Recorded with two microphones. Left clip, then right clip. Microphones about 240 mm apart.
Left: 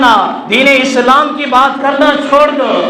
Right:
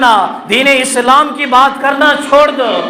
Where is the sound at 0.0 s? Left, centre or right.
Right.